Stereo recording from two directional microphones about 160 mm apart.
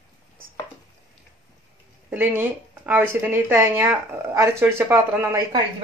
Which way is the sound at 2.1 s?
15° right (ahead or behind).